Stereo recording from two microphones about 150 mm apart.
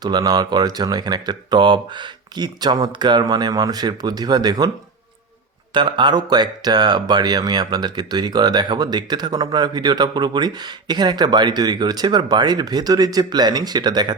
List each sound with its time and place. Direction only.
0.0 s speech: 25° right (ahead or behind)
5.7 s speech: 30° right (ahead or behind)